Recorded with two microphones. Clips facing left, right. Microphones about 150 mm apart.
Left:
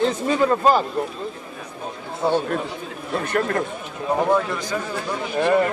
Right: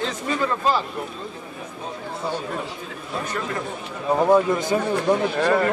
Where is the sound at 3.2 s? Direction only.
60° left (ahead or behind).